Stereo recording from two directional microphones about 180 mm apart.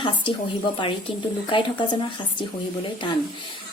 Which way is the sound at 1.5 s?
30° left (ahead or behind).